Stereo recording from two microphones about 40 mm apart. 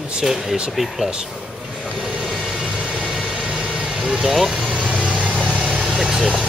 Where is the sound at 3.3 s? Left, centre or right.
Right.